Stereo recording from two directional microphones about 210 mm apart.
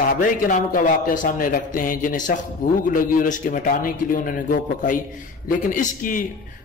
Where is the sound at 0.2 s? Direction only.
40° left (ahead or behind).